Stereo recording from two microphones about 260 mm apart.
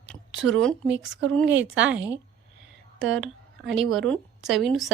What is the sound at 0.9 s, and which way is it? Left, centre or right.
Speech, right.